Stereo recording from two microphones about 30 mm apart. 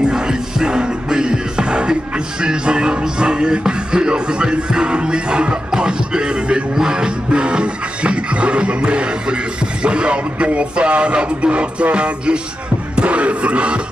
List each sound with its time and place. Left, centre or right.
0.1 s music: right
9.8 s speech: right
12.9 s music: right